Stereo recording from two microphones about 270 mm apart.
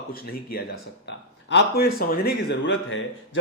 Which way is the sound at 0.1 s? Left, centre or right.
Left.